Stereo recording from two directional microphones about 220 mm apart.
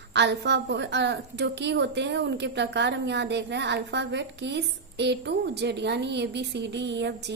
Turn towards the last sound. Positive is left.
turn(degrees=-50)  # may be behind; listen again after turning